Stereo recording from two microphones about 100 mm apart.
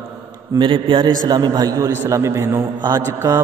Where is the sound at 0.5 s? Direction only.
50° right (ahead or behind).